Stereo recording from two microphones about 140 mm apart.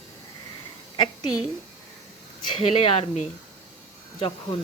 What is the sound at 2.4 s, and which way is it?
Speech, 35° left (ahead or behind).